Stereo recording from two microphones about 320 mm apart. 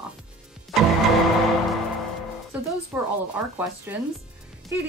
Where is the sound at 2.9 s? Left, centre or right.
Centre.